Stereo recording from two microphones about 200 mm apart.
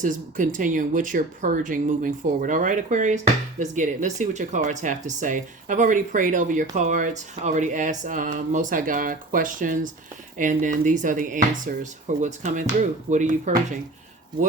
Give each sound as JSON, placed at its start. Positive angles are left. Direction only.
{"t": 0.0, "sound": "speech", "side_deg": -40}